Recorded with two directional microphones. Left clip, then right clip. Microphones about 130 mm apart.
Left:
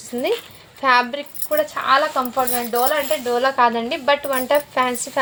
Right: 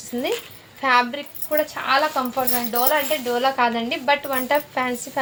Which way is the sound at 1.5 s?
35° left (ahead or behind).